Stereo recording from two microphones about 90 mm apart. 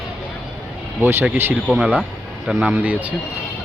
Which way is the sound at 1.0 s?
20° right (ahead or behind).